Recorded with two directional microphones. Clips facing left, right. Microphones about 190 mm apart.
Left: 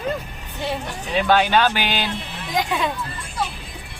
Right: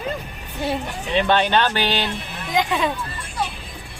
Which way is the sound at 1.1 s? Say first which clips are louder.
Left 1 dB; 5° left (ahead or behind).